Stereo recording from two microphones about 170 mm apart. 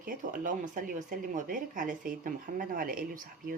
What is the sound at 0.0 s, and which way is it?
Speech, 50° right (ahead or behind).